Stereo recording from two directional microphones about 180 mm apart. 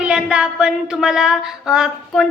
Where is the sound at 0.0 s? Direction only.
5° right (ahead or behind).